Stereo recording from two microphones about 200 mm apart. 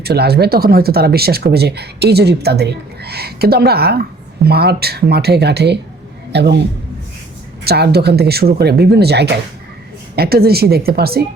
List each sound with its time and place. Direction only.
0.0 s a man's voice: 55° right (ahead or behind)
7.6 s speech: 55° right (ahead or behind)